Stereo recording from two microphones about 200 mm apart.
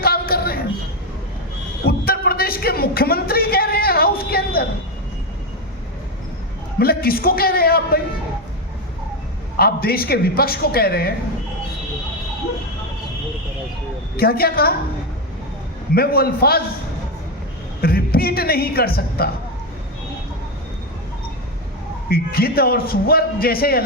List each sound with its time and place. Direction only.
0.0 s a sound: 50° left (ahead or behind)
1.9 s a sound: 50° left (ahead or behind)
6.7 s a man's voice: 50° left (ahead or behind)
9.6 s a man's voice: 50° left (ahead or behind)
14.2 s a man's voice: 50° left (ahead or behind)
16.0 s a man's voice: 50° left (ahead or behind)
17.7 s a woman's voice: 50° left (ahead or behind)
22.1 s a man's voice: 50° left (ahead or behind)